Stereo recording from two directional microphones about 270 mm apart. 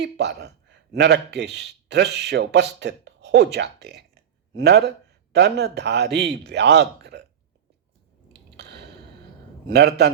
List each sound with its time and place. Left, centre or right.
0.0 s a man's voice: right
8.4 s squish: right
9.6 s a man's voice: right